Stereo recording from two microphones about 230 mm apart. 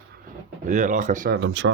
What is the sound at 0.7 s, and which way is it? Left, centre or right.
Speech, right.